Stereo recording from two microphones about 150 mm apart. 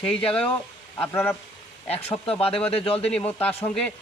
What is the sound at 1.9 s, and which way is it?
Speech, 40° left (ahead or behind).